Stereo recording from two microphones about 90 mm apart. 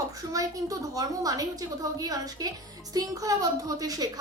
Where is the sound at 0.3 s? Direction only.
40° right (ahead or behind).